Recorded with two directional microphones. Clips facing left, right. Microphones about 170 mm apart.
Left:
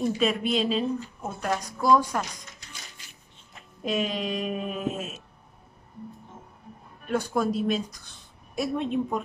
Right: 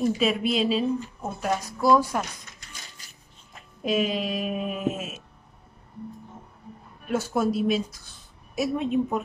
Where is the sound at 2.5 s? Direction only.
40° right (ahead or behind).